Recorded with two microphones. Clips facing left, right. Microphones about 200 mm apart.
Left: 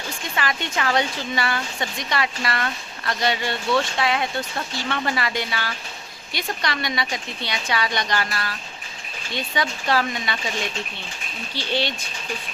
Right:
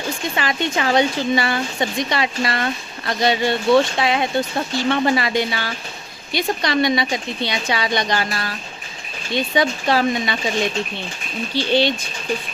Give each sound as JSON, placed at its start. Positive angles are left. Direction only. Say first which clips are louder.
{"t": 0.3, "sound": "speech", "louder": "right 3 dB", "side_deg": -25}
{"t": 11.6, "sound": "speech", "louder": "right 10 dB", "side_deg": 10}